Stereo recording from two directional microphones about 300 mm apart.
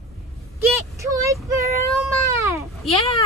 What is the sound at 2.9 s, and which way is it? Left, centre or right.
Speech, centre.